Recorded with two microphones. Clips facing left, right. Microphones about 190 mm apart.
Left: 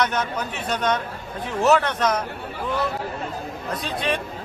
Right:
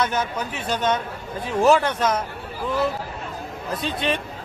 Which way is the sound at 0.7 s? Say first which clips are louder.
Right 1 dB; 25° right (ahead or behind).